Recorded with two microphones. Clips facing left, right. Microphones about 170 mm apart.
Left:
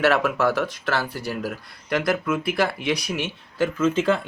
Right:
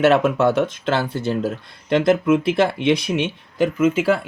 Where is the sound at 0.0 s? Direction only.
20° right (ahead or behind).